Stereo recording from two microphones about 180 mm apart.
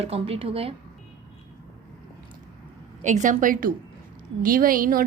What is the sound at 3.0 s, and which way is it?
A woman's voice, 45° right (ahead or behind).